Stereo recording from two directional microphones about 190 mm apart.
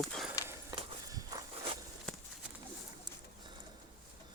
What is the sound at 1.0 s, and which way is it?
Walk, 20° right (ahead or behind).